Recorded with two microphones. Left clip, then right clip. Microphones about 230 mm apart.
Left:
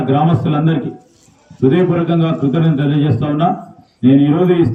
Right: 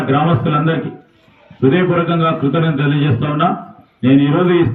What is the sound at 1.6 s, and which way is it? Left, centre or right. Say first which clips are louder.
Speech: even; left.